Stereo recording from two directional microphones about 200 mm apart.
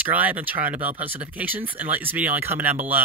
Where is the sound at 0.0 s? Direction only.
10° right (ahead or behind).